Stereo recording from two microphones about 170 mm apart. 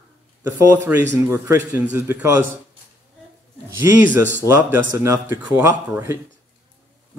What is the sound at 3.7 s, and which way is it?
Speech, 10° right (ahead or behind).